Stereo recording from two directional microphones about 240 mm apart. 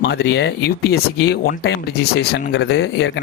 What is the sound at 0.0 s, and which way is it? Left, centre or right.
Speech, left.